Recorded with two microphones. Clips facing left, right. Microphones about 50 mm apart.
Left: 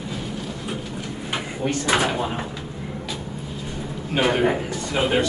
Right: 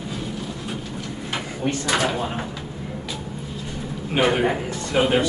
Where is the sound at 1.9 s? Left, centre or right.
Centre.